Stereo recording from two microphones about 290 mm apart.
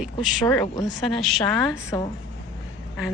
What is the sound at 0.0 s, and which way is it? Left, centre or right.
Speech, centre.